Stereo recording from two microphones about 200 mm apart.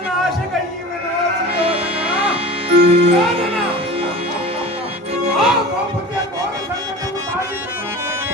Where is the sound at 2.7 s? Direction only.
30° right (ahead or behind).